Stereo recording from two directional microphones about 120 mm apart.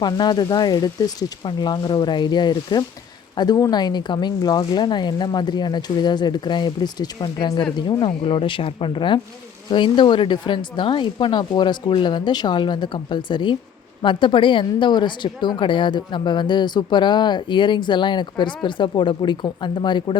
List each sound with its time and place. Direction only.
0.0 s a woman's voice: 35° left (ahead or behind)